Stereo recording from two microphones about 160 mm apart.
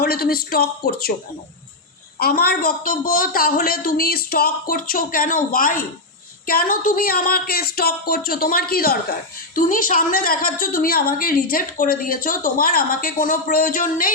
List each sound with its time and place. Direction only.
0.0 s speech: 70° left (ahead or behind)
2.1 s a woman's voice: 70° left (ahead or behind)
9.6 s a woman's voice: 60° left (ahead or behind)